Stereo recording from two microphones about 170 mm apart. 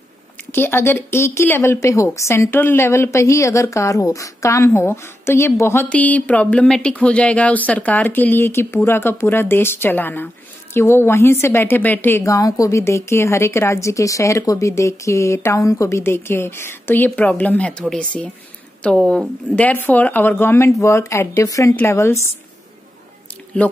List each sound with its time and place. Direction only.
0.5 s speech: 15° left (ahead or behind)